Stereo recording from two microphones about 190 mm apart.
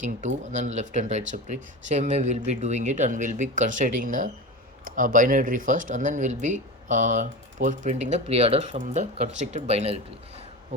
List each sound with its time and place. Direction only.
0.5 s speech: 40° right (ahead or behind)